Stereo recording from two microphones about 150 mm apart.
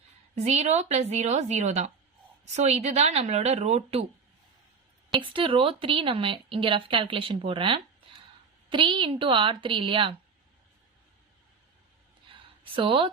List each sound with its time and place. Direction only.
0.4 s a woman's voice: 50° right (ahead or behind)
5.1 s speech: 35° right (ahead or behind)
12.7 s speech: 35° right (ahead or behind)